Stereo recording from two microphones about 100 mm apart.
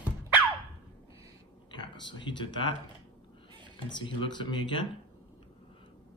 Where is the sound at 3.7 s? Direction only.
60° left (ahead or behind).